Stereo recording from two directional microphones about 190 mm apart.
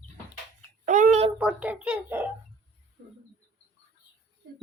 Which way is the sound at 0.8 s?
45° right (ahead or behind).